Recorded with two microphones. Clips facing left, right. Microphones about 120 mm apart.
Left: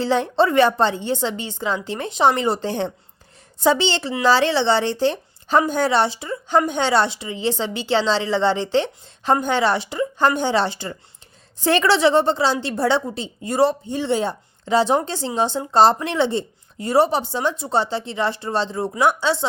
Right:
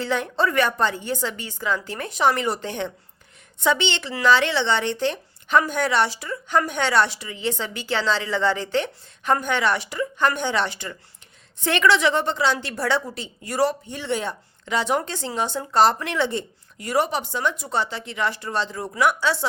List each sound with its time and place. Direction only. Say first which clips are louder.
0.0 s a woman's voice: left 5 dB; 30° left (ahead or behind)